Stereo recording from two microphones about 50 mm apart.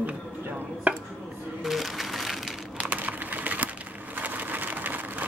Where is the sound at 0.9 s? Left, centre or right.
Right.